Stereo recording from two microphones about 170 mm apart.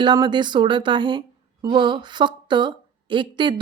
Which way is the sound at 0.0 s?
25° right (ahead or behind).